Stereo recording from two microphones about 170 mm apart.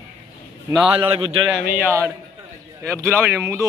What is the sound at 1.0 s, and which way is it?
Speech, 35° right (ahead or behind).